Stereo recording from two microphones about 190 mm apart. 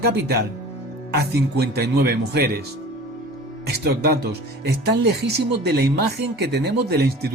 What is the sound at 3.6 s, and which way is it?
Speech, 60° right (ahead or behind).